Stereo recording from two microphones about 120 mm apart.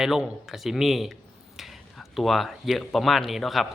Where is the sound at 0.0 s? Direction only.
5° right (ahead or behind).